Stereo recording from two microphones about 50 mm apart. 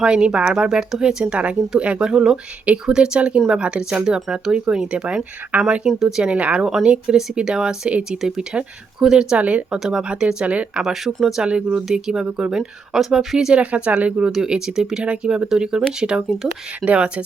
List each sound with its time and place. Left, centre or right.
0.0 s speech: centre
1.2 s speech: right
5.5 s speech: right
6.0 s speech: centre
6.2 s speech: right
6.7 s speech: centre
9.4 s speech: right
9.7 s speech: centre
13.6 s speech: right
14.2 s speech: centre
15.0 s speech: right